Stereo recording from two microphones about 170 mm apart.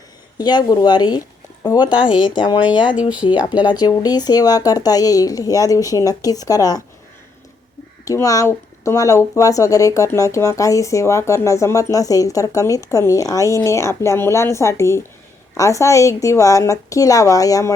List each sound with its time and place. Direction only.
0.3 s speech: 25° left (ahead or behind)
2.9 s speech: 5° right (ahead or behind)
3.8 s speech: 25° left (ahead or behind)
8.0 s speech: 20° left (ahead or behind)